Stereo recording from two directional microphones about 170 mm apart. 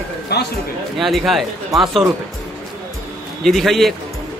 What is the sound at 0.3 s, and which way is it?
Speech, 75° left (ahead or behind).